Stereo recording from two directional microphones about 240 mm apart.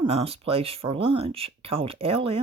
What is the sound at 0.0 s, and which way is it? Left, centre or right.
Speech, right.